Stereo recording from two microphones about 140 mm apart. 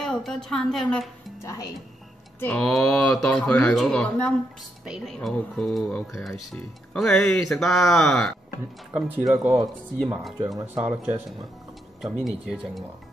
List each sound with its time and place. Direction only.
0.0 s speech: 5° left (ahead or behind)
1.4 s speech: 20° left (ahead or behind)
2.4 s speech: 5° left (ahead or behind)
8.9 s speech: 5° right (ahead or behind)
10.6 s speech: 10° right (ahead or behind)
12.0 s speech: centre (ahead or behind)